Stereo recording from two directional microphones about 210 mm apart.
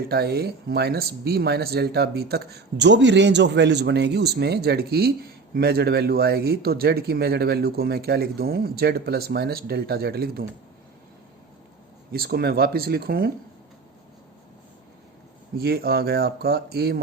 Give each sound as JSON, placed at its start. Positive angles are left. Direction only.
{"t": 0.1, "sound": "speech", "side_deg": -50}
{"t": 12.1, "sound": "speech", "side_deg": -45}
{"t": 15.5, "sound": "speech", "side_deg": -45}